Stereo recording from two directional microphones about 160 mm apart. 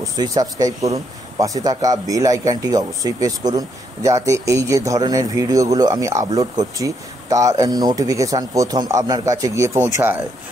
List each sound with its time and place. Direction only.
0.0 s speech: 20° right (ahead or behind)